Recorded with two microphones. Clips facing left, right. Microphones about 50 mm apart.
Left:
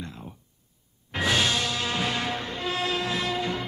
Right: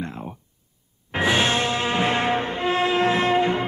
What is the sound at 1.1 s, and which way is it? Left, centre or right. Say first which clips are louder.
Music: right 4 dB; right.